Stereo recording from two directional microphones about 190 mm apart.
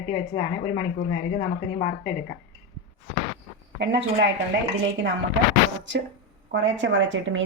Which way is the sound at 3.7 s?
65° right (ahead or behind).